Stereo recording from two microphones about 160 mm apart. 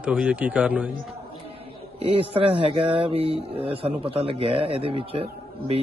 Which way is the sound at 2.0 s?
35° right (ahead or behind).